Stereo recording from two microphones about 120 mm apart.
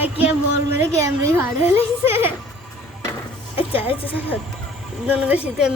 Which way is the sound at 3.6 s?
50° left (ahead or behind).